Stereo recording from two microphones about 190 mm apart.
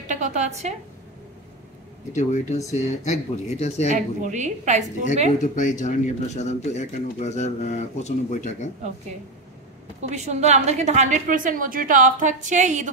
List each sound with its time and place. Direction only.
0.1 s a sound: 40° right (ahead or behind)
2.1 s speech: 40° left (ahead or behind)
3.9 s a woman's voice: 40° right (ahead or behind)
5.4 s speech: 40° left (ahead or behind)
10.0 s a woman's voice: 35° right (ahead or behind)